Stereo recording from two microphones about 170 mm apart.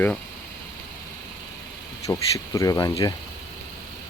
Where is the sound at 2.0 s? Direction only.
20° left (ahead or behind).